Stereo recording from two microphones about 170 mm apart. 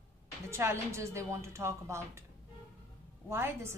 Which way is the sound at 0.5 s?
15° right (ahead or behind).